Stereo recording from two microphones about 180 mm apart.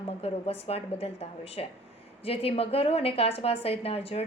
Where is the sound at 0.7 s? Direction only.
35° left (ahead or behind).